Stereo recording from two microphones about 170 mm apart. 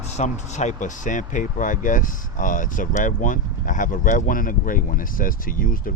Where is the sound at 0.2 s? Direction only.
45° left (ahead or behind).